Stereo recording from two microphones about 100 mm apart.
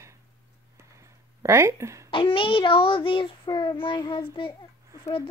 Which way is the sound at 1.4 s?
25° right (ahead or behind).